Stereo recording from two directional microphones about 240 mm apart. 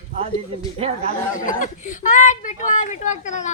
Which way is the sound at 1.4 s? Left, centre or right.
Left.